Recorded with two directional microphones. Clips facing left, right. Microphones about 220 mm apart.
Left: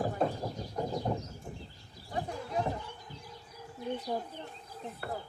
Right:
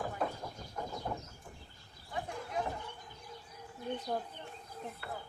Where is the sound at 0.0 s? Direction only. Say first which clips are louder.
Left 6 dB; 35° left (ahead or behind).